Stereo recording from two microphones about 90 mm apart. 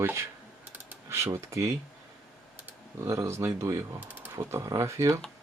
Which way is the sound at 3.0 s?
35° right (ahead or behind).